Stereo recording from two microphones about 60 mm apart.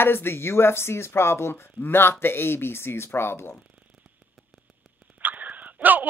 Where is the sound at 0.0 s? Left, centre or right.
Left.